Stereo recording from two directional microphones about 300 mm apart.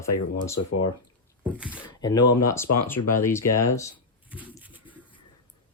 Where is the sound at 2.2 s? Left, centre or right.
Left.